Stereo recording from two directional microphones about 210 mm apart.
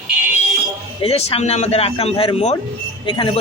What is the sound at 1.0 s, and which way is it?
A man's voice, 30° left (ahead or behind).